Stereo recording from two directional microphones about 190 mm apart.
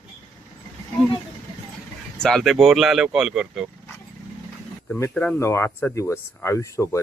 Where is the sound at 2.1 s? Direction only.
Centre (ahead or behind).